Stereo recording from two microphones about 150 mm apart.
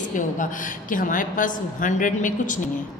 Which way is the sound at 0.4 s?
60° left (ahead or behind).